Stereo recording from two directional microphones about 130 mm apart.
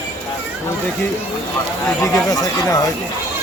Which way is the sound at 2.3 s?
30° left (ahead or behind).